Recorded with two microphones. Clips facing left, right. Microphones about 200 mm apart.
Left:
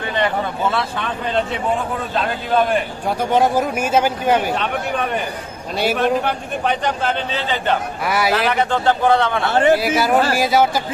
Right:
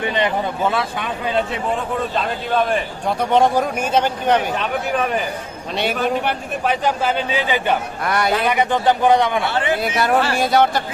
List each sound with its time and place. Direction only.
0.0 s a man's voice: 20° right (ahead or behind)
8.0 s speech: 5° left (ahead or behind)
8.5 s a man's voice: 15° right (ahead or behind)
9.5 s speech: 45° left (ahead or behind)
9.8 s speech: 5° left (ahead or behind)